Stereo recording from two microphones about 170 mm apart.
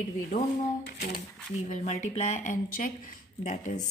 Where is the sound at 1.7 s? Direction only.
45° left (ahead or behind).